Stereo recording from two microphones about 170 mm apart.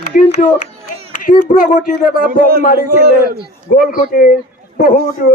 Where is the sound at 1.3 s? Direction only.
55° left (ahead or behind).